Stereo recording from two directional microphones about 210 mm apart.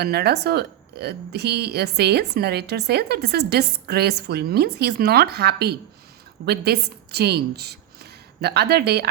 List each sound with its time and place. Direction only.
0.0 s a woman's voice: 50° right (ahead or behind)